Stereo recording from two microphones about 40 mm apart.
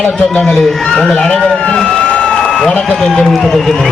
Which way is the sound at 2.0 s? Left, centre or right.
Left.